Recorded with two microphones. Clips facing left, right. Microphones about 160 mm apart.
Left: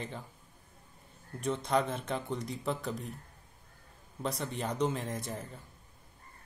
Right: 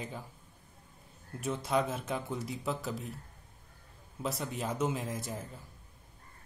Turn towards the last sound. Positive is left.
turn(degrees=-5)  # may be behind; listen again after turning